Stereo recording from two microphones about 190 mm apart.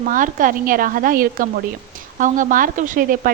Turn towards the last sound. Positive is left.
turn(degrees=-45)  # may be behind; listen again after turning